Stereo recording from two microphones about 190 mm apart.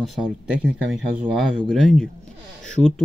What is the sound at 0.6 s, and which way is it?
Speech, 5° right (ahead or behind).